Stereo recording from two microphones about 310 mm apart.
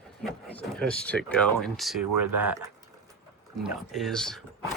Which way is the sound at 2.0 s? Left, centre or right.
Right.